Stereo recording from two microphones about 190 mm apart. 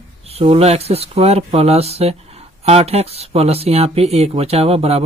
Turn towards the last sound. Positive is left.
turn(degrees=-30)  # may be behind; listen again after turning